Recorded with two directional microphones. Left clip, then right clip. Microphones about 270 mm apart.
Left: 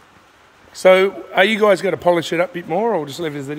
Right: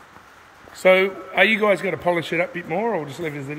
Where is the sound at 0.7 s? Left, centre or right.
Centre.